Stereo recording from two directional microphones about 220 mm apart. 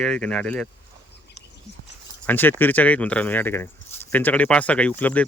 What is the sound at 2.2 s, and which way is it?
Speech, 10° left (ahead or behind).